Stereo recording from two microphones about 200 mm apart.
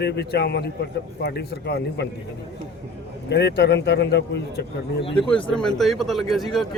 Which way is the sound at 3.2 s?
60° left (ahead or behind).